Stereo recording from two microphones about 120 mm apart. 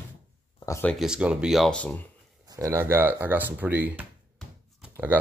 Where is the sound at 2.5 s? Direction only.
30° right (ahead or behind).